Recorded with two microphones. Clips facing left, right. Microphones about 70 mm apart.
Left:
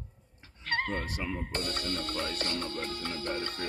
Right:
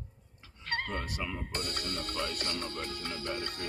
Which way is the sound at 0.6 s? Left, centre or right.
Left.